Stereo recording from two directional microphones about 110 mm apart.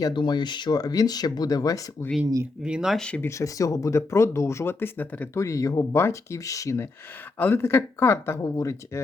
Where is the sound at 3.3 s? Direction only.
30° left (ahead or behind).